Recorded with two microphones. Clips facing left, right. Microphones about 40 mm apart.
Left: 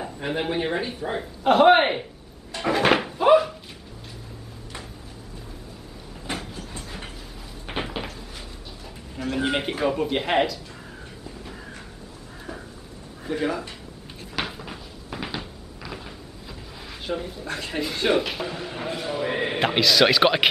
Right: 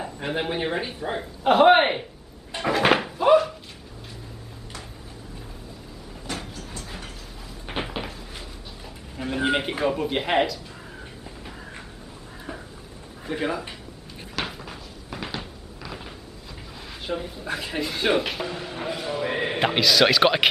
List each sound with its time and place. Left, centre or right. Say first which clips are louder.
0.0 s speech: even; centre
2.6 s dog: even; centre
6.5 s train: left 1 dB; left
7.6 s cupboard open or close: even; centre
9.2 s speech: right 1 dB; centre
13.2 s speech: left 1 dB; centre
14.4 s a sound: even; centre
17.0 s speech: even; centre